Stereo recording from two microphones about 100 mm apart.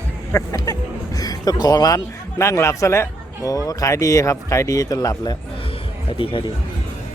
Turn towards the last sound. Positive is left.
turn(degrees=65)  # may be behind; listen again after turning